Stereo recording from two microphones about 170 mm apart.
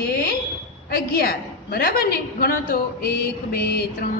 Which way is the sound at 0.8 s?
65° left (ahead or behind).